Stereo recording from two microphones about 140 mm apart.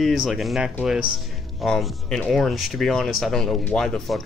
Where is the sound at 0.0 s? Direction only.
Centre (ahead or behind).